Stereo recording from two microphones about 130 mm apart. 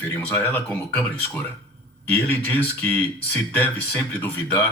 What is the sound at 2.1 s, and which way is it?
Speech, 15° left (ahead or behind).